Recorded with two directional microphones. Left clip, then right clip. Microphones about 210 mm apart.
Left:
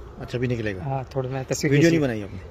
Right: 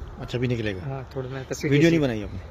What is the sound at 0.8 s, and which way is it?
Speech, 45° left (ahead or behind).